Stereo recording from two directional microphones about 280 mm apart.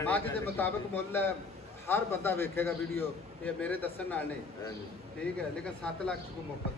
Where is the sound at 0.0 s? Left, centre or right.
Centre.